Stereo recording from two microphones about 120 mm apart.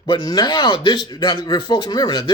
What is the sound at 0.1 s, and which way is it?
A man's voice, 35° left (ahead or behind).